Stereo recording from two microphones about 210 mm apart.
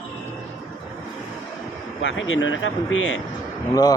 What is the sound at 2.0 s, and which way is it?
Speech, 65° left (ahead or behind).